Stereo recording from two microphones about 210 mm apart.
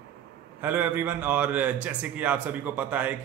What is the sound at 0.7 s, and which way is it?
A man's voice, 10° right (ahead or behind).